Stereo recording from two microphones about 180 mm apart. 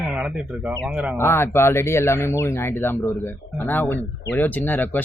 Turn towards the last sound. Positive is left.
turn(degrees=10)  # may be behind; listen again after turning